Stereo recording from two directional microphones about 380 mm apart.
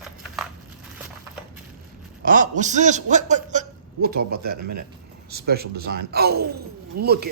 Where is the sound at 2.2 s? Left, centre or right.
Right.